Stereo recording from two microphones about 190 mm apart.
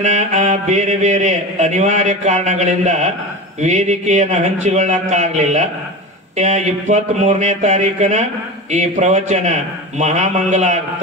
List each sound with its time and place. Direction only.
0.0 s mantra: 40° right (ahead or behind)